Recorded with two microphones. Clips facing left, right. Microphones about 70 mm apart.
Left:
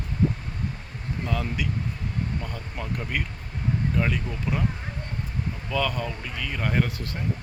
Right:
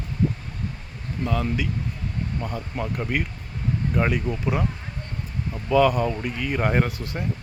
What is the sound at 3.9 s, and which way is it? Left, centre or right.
Speech, right.